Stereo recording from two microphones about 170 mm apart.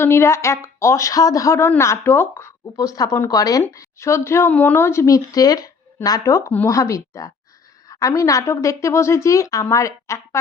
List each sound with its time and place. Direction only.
0.0 s a woman's voice: 15° left (ahead or behind)